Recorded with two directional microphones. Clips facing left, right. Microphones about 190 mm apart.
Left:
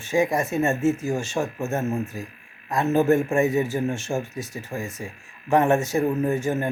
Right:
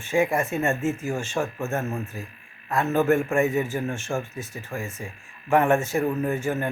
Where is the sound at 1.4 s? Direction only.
20° left (ahead or behind).